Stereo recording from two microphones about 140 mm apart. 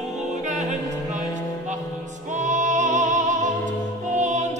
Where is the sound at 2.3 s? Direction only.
60° right (ahead or behind).